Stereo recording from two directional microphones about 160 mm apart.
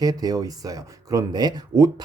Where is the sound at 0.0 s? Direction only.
25° right (ahead or behind).